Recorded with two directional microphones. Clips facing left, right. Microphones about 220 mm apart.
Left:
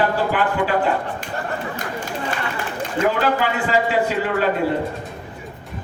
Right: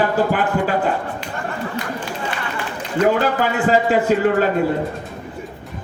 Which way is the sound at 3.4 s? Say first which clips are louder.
Right 3 dB; 45° right (ahead or behind).